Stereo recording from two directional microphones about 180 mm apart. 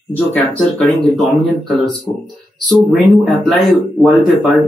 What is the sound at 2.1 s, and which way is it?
Speech, 20° left (ahead or behind).